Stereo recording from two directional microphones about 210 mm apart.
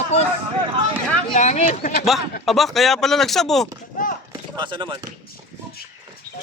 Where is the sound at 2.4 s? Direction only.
Centre (ahead or behind).